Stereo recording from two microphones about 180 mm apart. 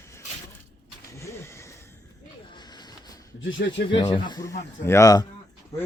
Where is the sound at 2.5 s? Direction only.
25° left (ahead or behind).